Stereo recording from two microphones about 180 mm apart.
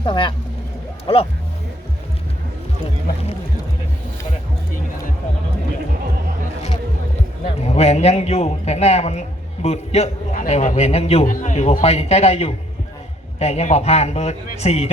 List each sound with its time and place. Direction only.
0.0 s a man's voice: 25° left (ahead or behind)
7.6 s a man's voice: 35° left (ahead or behind)